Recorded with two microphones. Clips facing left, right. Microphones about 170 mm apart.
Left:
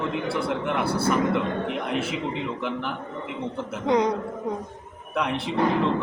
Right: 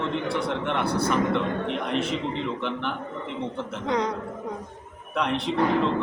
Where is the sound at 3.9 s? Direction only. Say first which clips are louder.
Left 5 dB; 20° left (ahead or behind).